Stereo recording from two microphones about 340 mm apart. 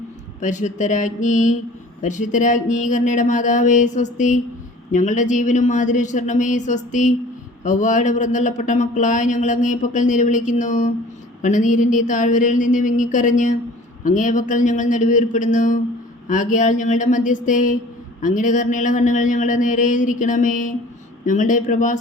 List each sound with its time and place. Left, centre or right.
0.4 s speech: left